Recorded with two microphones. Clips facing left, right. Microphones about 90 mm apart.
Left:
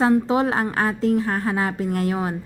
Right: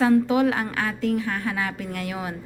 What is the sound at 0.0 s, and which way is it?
A woman's voice, 30° left (ahead or behind).